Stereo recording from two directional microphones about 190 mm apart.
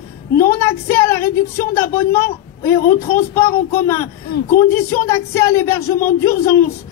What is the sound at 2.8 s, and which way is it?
Speech, 45° left (ahead or behind).